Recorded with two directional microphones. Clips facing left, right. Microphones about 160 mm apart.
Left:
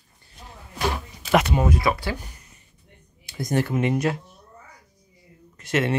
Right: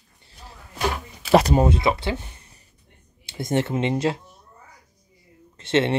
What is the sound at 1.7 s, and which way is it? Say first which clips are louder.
Speech: right 1 dB; 25° right (ahead or behind).